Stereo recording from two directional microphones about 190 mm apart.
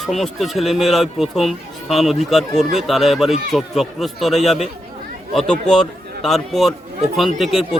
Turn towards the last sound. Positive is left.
turn(degrees=0)  # may be behind; listen again after turning